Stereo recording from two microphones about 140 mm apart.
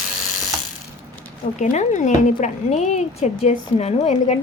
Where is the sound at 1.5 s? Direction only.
60° left (ahead or behind).